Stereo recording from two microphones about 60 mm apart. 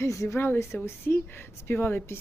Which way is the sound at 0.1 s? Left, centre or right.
Left.